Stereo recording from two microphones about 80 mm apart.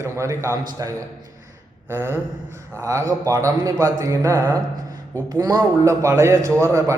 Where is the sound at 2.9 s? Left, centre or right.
Right.